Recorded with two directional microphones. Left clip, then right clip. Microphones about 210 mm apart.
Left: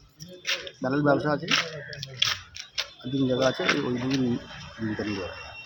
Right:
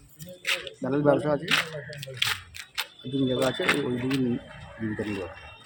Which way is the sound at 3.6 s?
50° right (ahead or behind).